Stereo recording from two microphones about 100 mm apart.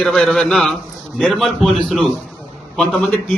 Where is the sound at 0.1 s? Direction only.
15° left (ahead or behind).